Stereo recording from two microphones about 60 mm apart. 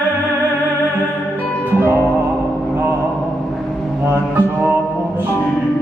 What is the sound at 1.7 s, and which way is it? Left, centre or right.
Music, right.